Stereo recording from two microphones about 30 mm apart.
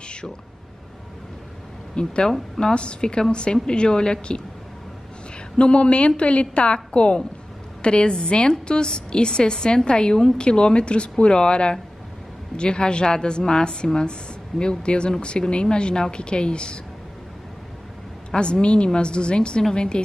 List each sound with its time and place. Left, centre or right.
2.0 s a woman's voice: left
5.6 s a woman's voice: left
18.3 s a woman's voice: left